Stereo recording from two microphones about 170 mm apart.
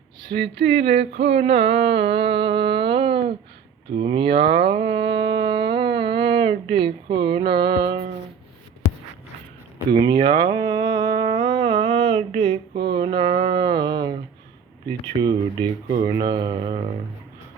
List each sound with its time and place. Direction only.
0.2 s a sound: 30° right (ahead or behind)
0.6 s mantra: 35° right (ahead or behind)
1.2 s a sound: 40° right (ahead or behind)
3.9 s mantra: 30° right (ahead or behind)
4.5 s a sound: 30° right (ahead or behind)
7.2 s speech: 30° right (ahead or behind)
9.9 s speech: 25° right (ahead or behind)
15.2 s speech: 25° right (ahead or behind)
16.0 s mantra: 30° right (ahead or behind)